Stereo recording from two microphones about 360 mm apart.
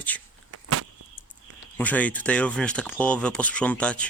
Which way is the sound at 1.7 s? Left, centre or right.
Centre.